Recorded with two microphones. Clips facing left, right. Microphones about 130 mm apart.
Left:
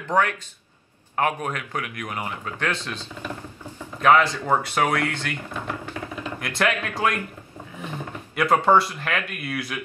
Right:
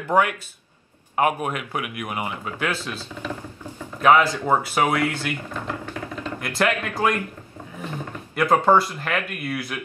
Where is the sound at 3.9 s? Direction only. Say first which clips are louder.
Right 1 dB; 5° right (ahead or behind).